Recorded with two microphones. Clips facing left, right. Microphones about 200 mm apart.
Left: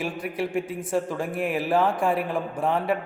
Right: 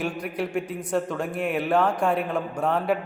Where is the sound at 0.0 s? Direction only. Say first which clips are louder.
Even; centre (ahead or behind).